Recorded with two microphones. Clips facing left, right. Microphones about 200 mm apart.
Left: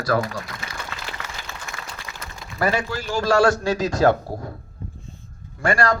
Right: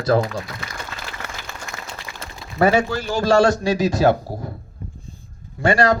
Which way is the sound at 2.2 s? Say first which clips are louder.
Right 6 dB; 25° right (ahead or behind).